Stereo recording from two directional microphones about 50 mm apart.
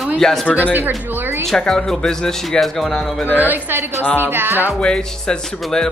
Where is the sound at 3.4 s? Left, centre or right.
Right.